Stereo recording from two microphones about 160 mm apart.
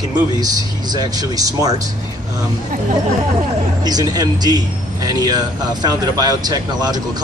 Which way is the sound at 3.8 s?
25° right (ahead or behind).